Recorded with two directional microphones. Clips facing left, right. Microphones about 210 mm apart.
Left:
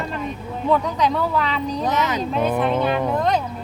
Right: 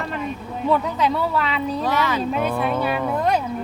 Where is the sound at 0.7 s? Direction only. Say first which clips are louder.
Left 1 dB; 5° right (ahead or behind).